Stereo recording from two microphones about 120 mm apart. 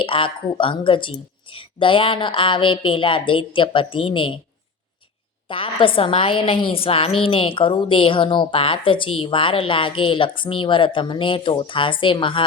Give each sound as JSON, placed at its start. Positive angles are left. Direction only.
{"t": 0.0, "sound": "a woman's voice", "side_deg": 45}
{"t": 5.5, "sound": "a woman's voice", "side_deg": 45}